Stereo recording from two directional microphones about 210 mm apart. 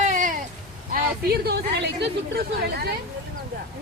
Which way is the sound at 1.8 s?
50° right (ahead or behind).